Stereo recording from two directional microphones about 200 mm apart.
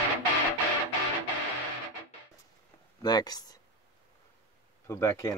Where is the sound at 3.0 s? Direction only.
20° left (ahead or behind).